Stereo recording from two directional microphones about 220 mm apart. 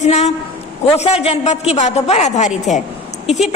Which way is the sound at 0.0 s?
30° left (ahead or behind).